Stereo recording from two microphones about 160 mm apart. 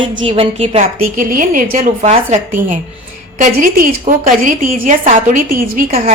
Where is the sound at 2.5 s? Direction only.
60° right (ahead or behind).